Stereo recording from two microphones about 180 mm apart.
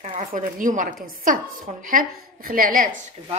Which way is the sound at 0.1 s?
50° right (ahead or behind).